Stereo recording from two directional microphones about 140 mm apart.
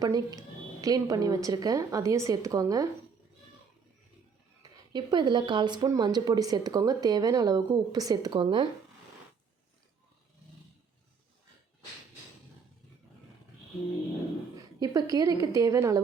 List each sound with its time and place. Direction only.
0.0 s speech: 25° right (ahead or behind)
4.9 s speech: 30° right (ahead or behind)
14.8 s speech: 25° right (ahead or behind)